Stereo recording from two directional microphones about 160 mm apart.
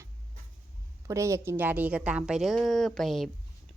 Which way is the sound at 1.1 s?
20° right (ahead or behind).